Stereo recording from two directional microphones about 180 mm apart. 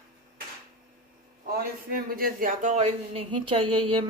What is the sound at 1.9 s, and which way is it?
Speech, 55° right (ahead or behind).